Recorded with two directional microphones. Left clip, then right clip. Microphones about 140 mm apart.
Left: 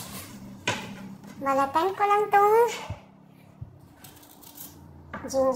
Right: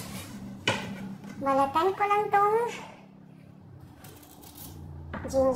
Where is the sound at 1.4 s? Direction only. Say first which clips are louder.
Left 1 dB; 35° left (ahead or behind).